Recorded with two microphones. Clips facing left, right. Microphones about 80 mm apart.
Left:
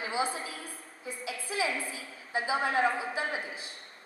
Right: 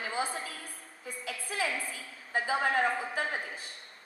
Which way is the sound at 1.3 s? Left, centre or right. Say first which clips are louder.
Left 2 dB; right.